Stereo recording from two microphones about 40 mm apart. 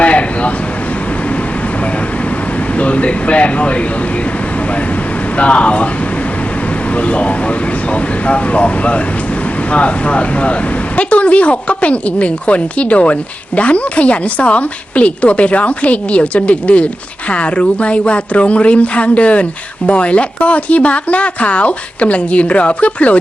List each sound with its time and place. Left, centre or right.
0.0 s a sound: left
2.7 s air conditioning: left
5.4 s a woman's voice: left
7.1 s a woman's voice: left